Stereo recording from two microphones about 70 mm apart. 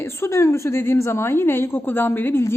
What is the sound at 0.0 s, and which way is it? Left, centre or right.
A woman's voice, left.